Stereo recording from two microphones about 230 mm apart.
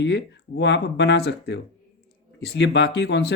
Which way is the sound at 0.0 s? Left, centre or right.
Left.